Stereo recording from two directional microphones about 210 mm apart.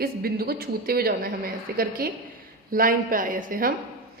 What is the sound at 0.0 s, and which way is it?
A man's voice, 45° right (ahead or behind).